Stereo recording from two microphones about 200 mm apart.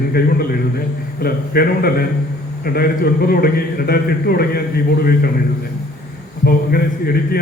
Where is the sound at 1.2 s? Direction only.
50° left (ahead or behind).